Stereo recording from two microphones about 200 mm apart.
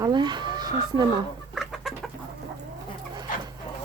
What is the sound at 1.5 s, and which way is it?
Chicken, centre (ahead or behind).